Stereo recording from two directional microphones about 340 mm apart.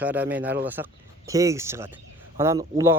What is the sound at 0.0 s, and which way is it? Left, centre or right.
Speech, centre.